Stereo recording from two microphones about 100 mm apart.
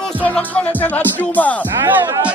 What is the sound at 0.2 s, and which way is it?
Music, 15° left (ahead or behind).